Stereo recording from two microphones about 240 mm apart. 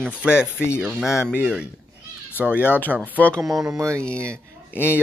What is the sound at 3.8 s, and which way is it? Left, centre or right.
Speech, centre.